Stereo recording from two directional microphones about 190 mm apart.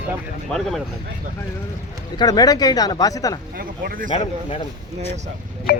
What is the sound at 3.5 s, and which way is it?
Speech, 50° right (ahead or behind).